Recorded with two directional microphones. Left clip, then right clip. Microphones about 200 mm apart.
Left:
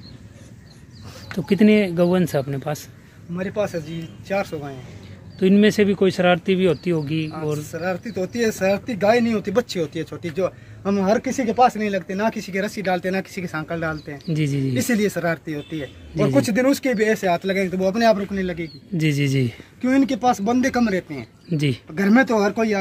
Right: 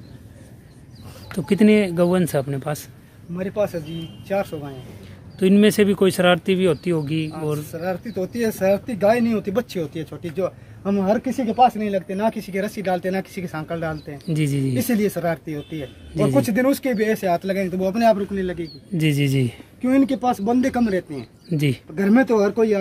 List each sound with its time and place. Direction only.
1.3 s speech: centre (ahead or behind)
14.1 s speech: centre (ahead or behind)
14.9 s speech: 10° right (ahead or behind)
17.9 s speech: 5° left (ahead or behind)
18.3 s a man's voice: 20° left (ahead or behind)
18.9 s speech: 5° right (ahead or behind)
19.8 s speech: 20° left (ahead or behind)
21.5 s speech: centre (ahead or behind)
21.9 s speech: 15° left (ahead or behind)